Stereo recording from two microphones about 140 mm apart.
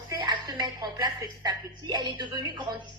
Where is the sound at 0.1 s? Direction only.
30° right (ahead or behind).